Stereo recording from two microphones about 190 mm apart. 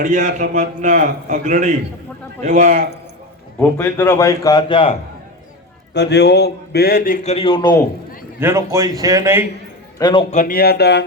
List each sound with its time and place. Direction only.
0.0 s a man's voice: 40° right (ahead or behind)
3.6 s a man's voice: 10° left (ahead or behind); by 4.9 s 30° left (ahead or behind)
5.9 s speech: 65° left (ahead or behind)
7.3 s a man's voice: 30° left (ahead or behind)
8.4 s a man's voice: 15° right (ahead or behind)
10.0 s a man's voice: 25° left (ahead or behind)
10.3 s speech: 50° left (ahead or behind)